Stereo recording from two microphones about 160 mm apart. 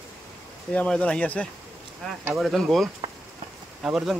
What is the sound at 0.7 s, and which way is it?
Speech, 5° left (ahead or behind).